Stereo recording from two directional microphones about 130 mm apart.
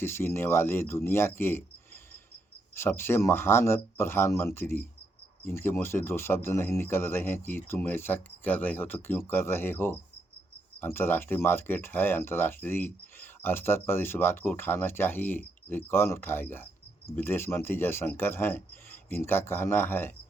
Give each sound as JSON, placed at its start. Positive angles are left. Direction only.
{"t": 0.0, "sound": "speech", "side_deg": 20}
{"t": 2.7, "sound": "speech", "side_deg": 20}